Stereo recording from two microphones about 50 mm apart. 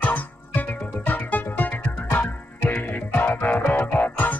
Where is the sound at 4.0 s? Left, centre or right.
Left.